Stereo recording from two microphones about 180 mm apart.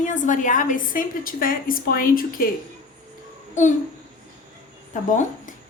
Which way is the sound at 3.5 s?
40° left (ahead or behind).